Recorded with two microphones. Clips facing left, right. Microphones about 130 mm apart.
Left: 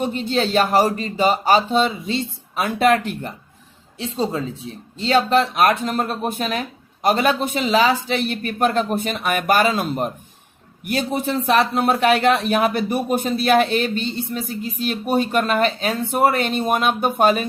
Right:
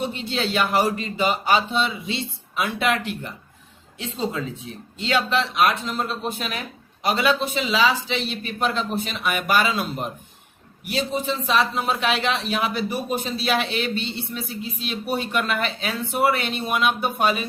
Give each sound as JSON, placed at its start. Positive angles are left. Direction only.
{"t": 0.0, "sound": "speech", "side_deg": 45}
{"t": 3.9, "sound": "a man's voice", "side_deg": 35}